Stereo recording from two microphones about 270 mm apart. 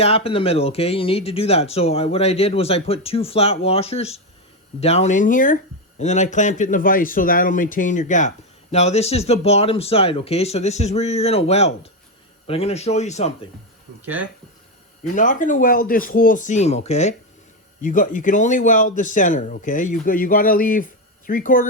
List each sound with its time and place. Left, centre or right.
0.0 s speech: left
15.0 s speech: left